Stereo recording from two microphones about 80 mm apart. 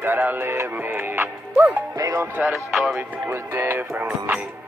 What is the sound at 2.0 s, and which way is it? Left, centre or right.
Speech, right.